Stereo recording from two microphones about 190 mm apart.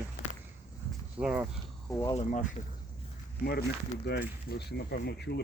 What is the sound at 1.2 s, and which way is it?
Speech, 5° right (ahead or behind).